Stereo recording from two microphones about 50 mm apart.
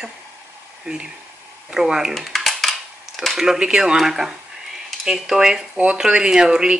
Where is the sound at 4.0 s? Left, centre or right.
Centre.